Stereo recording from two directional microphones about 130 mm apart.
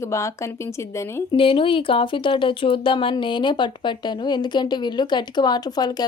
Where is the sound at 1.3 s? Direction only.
45° left (ahead or behind).